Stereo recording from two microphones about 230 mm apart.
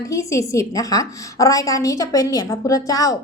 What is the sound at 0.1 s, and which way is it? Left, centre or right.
A woman's voice, centre.